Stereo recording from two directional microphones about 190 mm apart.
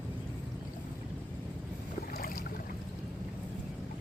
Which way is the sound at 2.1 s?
50° left (ahead or behind).